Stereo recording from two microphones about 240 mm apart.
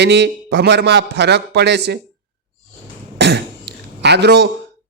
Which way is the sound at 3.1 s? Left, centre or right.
Right.